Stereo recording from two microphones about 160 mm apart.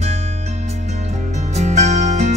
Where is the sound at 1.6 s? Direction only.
45° right (ahead or behind).